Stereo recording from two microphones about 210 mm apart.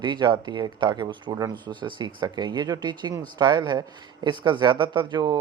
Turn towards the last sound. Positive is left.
turn(degrees=-20)  # may be behind; listen again after turning